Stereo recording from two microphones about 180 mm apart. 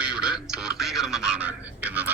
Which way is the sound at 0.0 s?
5° right (ahead or behind).